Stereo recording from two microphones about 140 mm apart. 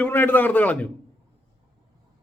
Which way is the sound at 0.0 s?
15° left (ahead or behind).